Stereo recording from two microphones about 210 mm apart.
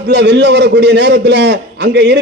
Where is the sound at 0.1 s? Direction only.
55° right (ahead or behind).